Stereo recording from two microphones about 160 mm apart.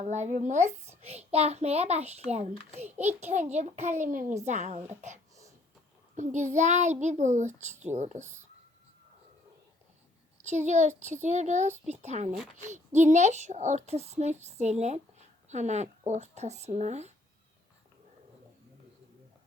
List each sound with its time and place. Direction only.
0.0 s a child's voice: 45° right (ahead or behind)
10.4 s a child's voice: 45° right (ahead or behind)